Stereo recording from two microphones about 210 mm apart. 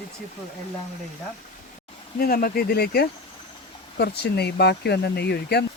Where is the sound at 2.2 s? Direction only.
45° left (ahead or behind).